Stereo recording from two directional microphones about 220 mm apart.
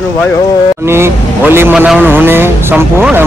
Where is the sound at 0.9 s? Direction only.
10° right (ahead or behind).